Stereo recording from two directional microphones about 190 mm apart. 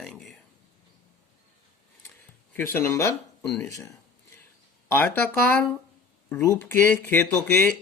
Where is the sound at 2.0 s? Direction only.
10° left (ahead or behind).